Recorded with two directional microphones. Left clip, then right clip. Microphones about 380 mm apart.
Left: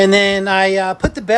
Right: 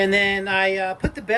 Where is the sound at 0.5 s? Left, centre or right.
Left.